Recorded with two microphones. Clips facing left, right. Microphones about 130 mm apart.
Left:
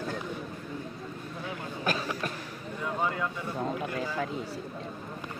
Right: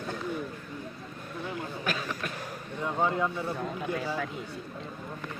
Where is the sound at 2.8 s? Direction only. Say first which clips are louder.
Right 3 dB; 25° right (ahead or behind).